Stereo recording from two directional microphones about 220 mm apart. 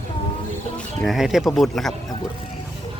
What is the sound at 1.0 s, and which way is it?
Speech, centre (ahead or behind).